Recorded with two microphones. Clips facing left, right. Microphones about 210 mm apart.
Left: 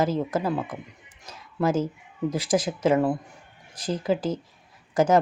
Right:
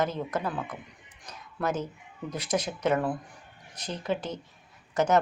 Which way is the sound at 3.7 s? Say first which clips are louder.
Left 6 dB; 90° left.